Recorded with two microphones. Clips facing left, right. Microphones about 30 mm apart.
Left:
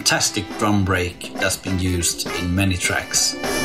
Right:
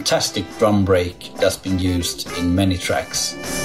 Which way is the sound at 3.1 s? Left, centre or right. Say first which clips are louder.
Left 3 dB; left.